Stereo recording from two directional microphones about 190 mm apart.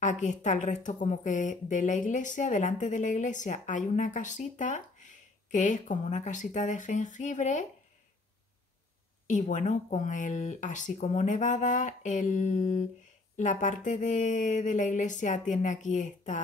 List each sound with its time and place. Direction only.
0.0 s a woman's voice: 40° left (ahead or behind)
9.3 s a woman's voice: 40° left (ahead or behind)